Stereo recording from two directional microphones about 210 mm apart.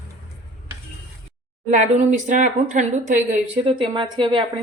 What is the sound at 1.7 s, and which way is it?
Speech, 35° right (ahead or behind).